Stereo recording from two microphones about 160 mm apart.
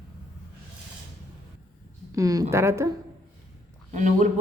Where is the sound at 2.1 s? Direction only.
20° right (ahead or behind).